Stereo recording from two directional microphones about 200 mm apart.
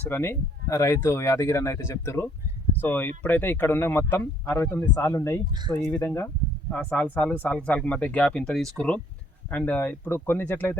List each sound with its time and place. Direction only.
0.1 s speech: 10° left (ahead or behind)